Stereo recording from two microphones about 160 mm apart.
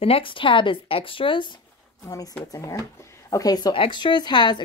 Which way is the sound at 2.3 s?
20° left (ahead or behind).